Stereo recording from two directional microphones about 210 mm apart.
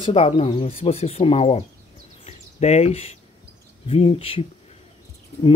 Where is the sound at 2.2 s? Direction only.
30° left (ahead or behind).